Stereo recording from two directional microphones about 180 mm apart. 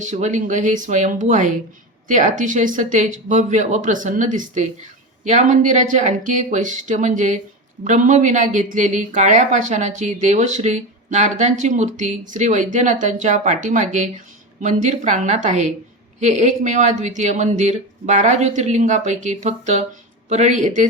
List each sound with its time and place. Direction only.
0.0 s a woman's voice: 40° right (ahead or behind)